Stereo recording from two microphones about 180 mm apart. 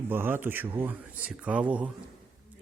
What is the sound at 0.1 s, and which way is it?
Speech, 10° right (ahead or behind).